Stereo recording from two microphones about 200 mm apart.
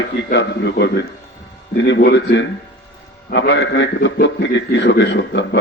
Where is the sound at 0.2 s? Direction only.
60° left (ahead or behind).